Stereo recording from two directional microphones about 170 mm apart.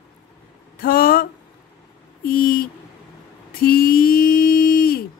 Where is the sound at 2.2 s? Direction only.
60° left (ahead or behind).